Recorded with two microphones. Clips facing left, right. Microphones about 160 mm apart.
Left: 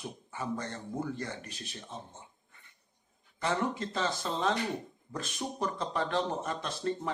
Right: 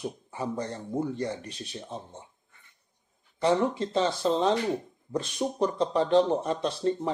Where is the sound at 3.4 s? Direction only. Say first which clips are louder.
Right 7 dB; 30° right (ahead or behind).